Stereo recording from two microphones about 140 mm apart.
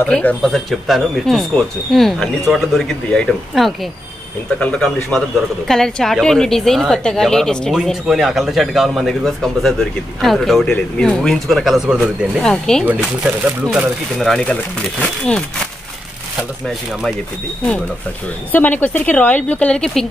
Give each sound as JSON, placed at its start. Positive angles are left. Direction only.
{"t": 0.0, "sound": "a woman's voice", "side_deg": 10}
{"t": 12.8, "sound": "speech", "side_deg": -10}
{"t": 18.5, "sound": "a woman's voice", "side_deg": 10}